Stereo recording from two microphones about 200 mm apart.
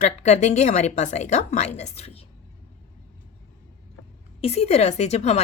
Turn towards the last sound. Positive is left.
turn(degrees=35)  # may be behind; listen again after turning